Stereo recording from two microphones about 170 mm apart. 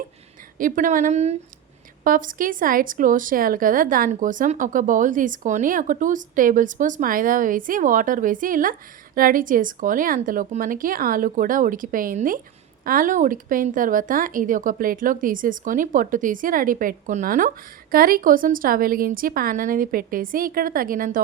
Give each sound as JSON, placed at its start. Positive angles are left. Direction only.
{"t": 0.6, "sound": "a woman's voice", "side_deg": -50}
{"t": 2.0, "sound": "a woman's voice", "side_deg": -55}